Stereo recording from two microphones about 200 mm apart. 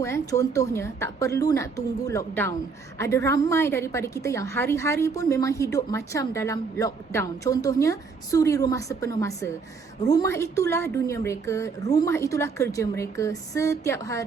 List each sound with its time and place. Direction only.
0.0 s a woman's voice: 15° left (ahead or behind)